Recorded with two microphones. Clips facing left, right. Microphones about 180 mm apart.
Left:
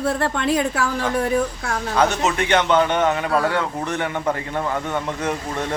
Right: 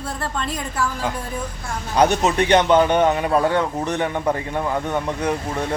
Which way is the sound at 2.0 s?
15° right (ahead or behind).